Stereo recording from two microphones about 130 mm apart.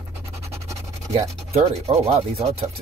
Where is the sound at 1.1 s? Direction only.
55° right (ahead or behind).